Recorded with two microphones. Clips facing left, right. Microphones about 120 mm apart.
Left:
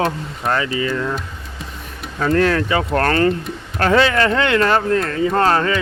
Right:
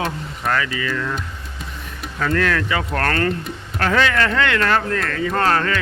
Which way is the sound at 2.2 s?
30° left (ahead or behind).